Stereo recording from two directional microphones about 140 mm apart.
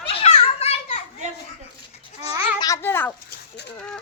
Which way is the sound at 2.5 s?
25° left (ahead or behind).